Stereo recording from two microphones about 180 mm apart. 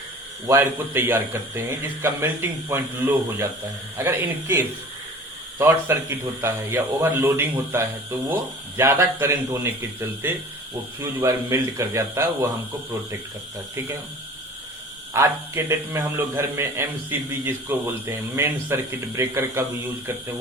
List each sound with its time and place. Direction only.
0.4 s a man's voice: 15° right (ahead or behind)
15.1 s a man's voice: 15° right (ahead or behind)